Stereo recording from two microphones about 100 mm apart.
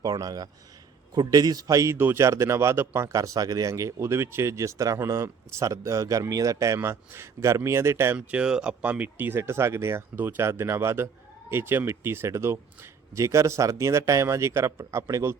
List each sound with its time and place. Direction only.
0.0 s a man's voice: 40° right (ahead or behind)